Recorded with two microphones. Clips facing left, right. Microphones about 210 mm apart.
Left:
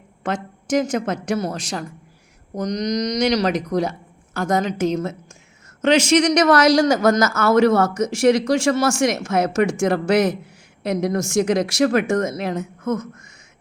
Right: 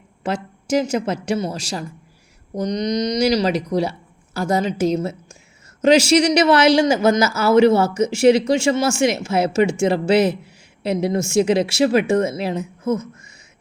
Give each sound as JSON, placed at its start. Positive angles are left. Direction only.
{"t": 0.2, "sound": "speech", "side_deg": -30}
{"t": 7.1, "sound": "speech", "side_deg": -5}
{"t": 7.5, "sound": "speech", "side_deg": -30}